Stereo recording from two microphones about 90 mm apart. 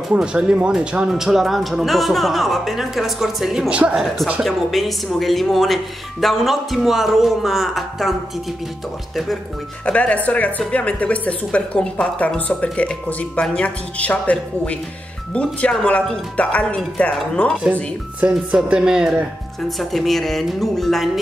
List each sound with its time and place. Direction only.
0.1 s speech: 10° right (ahead or behind)
9.8 s a woman's voice: 15° left (ahead or behind)
18.2 s speech: 10° right (ahead or behind)